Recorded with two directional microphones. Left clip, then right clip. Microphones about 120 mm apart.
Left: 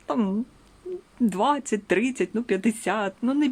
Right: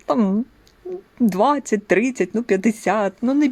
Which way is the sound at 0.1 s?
45° right (ahead or behind).